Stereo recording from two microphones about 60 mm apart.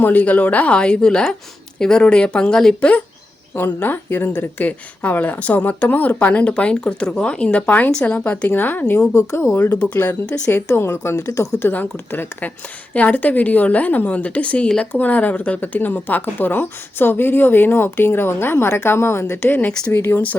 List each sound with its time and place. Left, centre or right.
0.0 s speech: left; by 2.7 s centre
3.5 s speech: left
9.7 s speech: centre
10.0 s speech: left
10.5 s a woman's voice: left
11.7 s speech: left